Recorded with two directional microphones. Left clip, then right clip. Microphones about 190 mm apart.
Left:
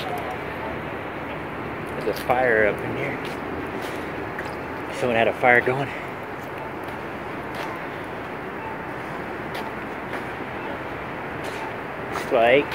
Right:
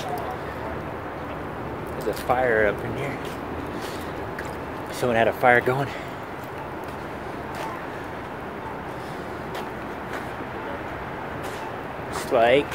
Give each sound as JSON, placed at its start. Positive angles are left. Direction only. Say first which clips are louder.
{"t": 2.2, "sound": "speech", "louder": "left 1 dB", "side_deg": -5}
{"t": 5.0, "sound": "speech", "louder": "even", "side_deg": -15}
{"t": 12.3, "sound": "speech", "louder": "left 1 dB", "side_deg": -10}